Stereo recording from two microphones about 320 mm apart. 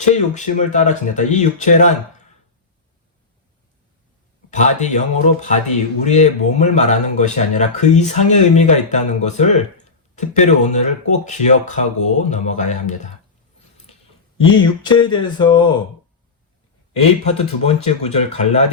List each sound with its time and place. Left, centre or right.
0.1 s speech: left
4.5 s speech: left
14.4 s speech: centre
17.2 s speech: centre